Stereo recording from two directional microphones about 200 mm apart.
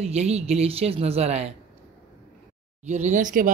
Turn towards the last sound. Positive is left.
turn(degrees=-40)  # may be behind; listen again after turning